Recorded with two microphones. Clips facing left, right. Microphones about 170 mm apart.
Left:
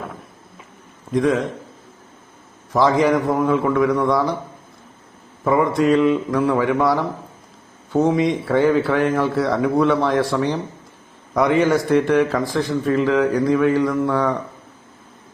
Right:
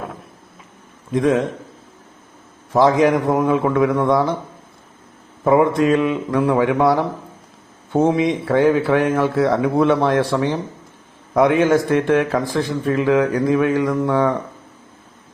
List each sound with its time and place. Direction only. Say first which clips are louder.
1.1 s speech: right 1 dB; 20° right (ahead or behind)
2.7 s speech: right 2 dB; 20° right (ahead or behind)
5.8 s a man's voice: left 1 dB; 15° right (ahead or behind)